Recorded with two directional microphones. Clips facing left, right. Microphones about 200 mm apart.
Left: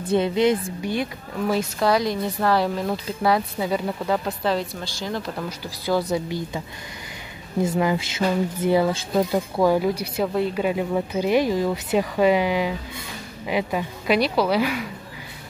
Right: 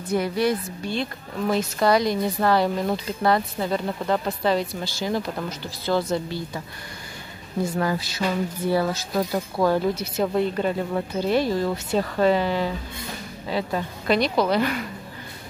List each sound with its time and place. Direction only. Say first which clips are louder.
0.1 s a woman's voice: left 3 dB; 20° left (ahead or behind)
1.5 s speech: right 1 dB; centre (ahead or behind)
5.5 s speech: left 2 dB; 10° left (ahead or behind)
7.7 s speech: left 3 dB; 15° left (ahead or behind)